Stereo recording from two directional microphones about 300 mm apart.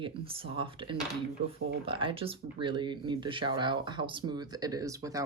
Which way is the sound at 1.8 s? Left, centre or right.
Centre.